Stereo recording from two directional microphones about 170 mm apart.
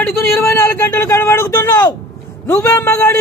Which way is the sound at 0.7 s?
15° left (ahead or behind).